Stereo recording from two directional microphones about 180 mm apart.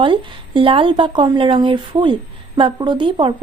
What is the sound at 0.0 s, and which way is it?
Speech, 30° right (ahead or behind).